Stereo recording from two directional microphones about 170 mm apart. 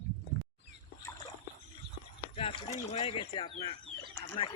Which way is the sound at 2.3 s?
35° left (ahead or behind).